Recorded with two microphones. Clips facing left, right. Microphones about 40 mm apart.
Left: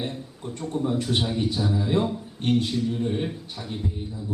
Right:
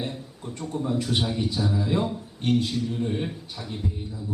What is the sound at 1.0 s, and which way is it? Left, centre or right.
A man's voice, centre.